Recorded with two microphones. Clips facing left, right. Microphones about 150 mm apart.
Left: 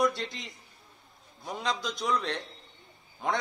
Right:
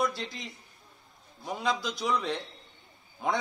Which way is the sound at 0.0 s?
Centre (ahead or behind).